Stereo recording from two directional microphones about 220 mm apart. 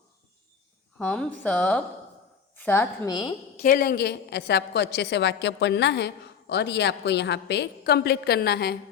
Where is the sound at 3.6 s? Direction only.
45° left (ahead or behind).